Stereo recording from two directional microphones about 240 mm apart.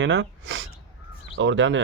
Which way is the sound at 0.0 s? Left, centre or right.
Right.